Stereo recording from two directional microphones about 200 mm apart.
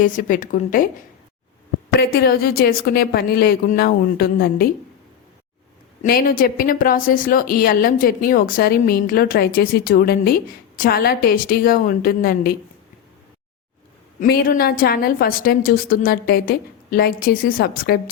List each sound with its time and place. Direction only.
0.0 s a woman's voice: 40° left (ahead or behind)
2.0 s a woman's voice: 50° left (ahead or behind)
6.0 s a woman's voice: 45° left (ahead or behind)
14.2 s a woman's voice: 50° left (ahead or behind)